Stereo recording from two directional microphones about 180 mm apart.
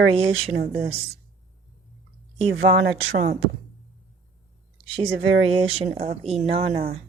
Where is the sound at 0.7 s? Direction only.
35° right (ahead or behind).